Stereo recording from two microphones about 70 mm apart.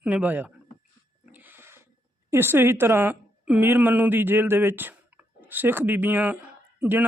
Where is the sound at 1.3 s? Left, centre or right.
Right.